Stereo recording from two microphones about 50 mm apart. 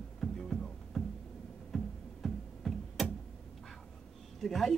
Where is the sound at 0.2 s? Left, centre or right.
Centre.